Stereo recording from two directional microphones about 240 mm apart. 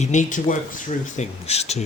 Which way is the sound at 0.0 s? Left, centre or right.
Left.